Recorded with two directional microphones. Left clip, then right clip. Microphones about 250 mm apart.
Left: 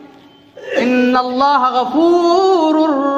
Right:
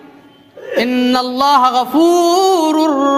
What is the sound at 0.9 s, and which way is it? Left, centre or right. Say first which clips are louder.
Music: left 5 dB; right.